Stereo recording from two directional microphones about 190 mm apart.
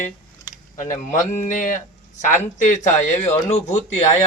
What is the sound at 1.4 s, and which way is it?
Speech, 40° left (ahead or behind).